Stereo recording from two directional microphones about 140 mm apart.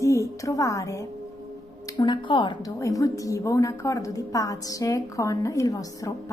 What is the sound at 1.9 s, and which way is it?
Speech, 35° left (ahead or behind).